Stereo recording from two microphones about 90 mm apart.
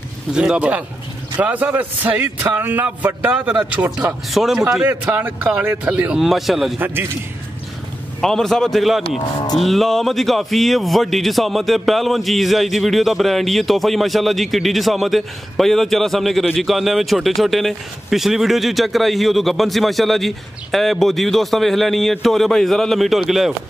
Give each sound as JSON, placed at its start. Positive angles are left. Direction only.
{"t": 0.3, "sound": "a man's voice", "side_deg": -10}
{"t": 4.3, "sound": "a man's voice", "side_deg": -5}
{"t": 4.8, "sound": "a man's voice", "side_deg": -15}
{"t": 6.8, "sound": "a man's voice", "side_deg": -25}
{"t": 8.2, "sound": "a man's voice", "side_deg": 5}